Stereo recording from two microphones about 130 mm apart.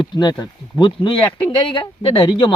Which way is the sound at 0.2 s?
35° left (ahead or behind).